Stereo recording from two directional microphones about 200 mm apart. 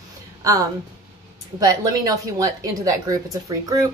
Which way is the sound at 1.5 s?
15° right (ahead or behind).